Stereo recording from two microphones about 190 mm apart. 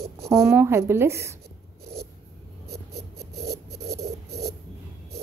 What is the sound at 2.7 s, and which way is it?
Writing, 60° right (ahead or behind).